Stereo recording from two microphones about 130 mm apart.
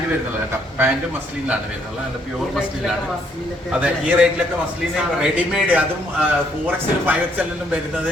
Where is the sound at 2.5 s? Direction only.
5° right (ahead or behind).